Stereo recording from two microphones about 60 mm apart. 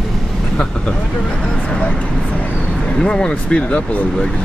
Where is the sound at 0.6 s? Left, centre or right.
Centre.